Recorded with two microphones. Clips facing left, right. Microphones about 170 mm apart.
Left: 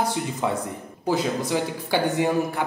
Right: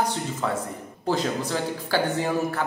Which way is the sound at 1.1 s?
10° left (ahead or behind).